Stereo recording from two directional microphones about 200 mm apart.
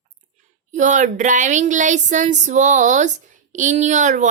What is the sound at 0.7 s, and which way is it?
Speech, 40° right (ahead or behind).